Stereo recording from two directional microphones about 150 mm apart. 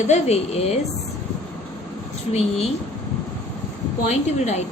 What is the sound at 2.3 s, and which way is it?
Speech, 45° left (ahead or behind).